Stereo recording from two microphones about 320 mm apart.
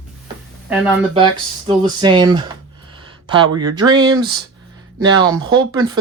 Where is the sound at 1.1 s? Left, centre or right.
Centre.